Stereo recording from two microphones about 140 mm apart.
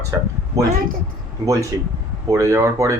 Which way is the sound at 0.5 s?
25° right (ahead or behind).